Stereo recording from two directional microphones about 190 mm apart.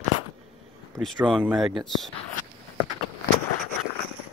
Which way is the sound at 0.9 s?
Centre (ahead or behind).